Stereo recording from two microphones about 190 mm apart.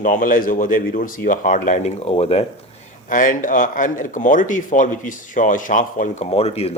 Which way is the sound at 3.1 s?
45° left (ahead or behind).